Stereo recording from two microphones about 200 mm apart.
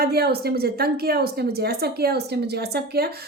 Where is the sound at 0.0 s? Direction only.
50° right (ahead or behind).